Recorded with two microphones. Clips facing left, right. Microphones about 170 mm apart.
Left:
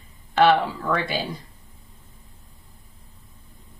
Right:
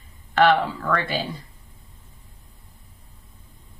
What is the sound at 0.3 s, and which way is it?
Speech, 15° left (ahead or behind).